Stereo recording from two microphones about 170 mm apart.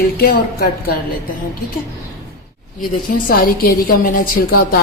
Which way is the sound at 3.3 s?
60° left (ahead or behind).